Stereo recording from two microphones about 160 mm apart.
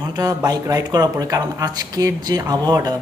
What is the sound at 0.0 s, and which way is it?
A man's voice, 25° right (ahead or behind).